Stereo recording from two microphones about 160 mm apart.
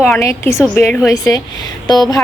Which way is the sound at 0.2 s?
15° left (ahead or behind).